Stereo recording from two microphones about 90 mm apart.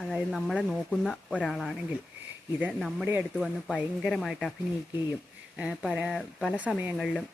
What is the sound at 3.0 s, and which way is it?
Speech, 25° right (ahead or behind).